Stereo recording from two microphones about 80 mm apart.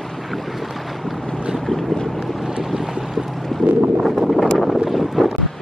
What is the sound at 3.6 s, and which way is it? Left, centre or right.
Wind noise, centre.